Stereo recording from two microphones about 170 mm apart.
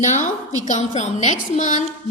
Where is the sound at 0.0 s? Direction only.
45° left (ahead or behind).